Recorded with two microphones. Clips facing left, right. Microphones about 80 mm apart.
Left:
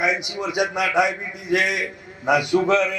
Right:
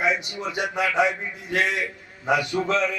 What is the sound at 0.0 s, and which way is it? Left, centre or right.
A man's voice, centre.